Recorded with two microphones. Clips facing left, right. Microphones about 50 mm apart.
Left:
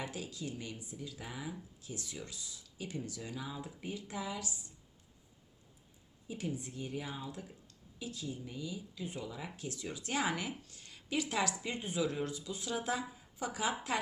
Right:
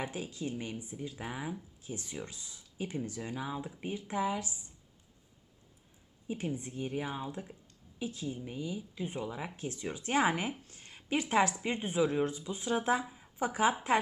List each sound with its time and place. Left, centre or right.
0.0 s speech: right
6.2 s speech: right